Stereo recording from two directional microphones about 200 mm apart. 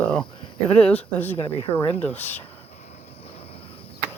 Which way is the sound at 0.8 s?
10° left (ahead or behind).